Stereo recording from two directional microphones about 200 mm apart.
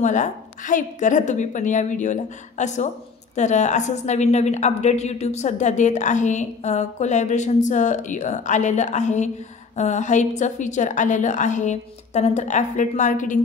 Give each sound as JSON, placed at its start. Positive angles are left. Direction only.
{"t": 0.0, "sound": "a woman's voice", "side_deg": 40}